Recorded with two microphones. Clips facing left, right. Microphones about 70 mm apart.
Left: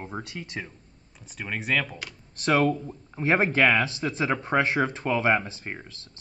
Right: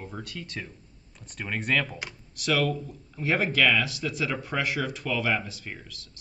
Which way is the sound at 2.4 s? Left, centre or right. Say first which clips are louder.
Left 4 dB; left.